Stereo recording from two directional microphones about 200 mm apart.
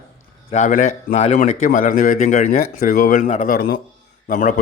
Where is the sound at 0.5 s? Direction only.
40° left (ahead or behind).